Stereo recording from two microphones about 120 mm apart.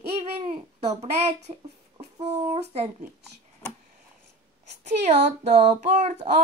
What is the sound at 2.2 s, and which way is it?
Speech, 60° right (ahead or behind).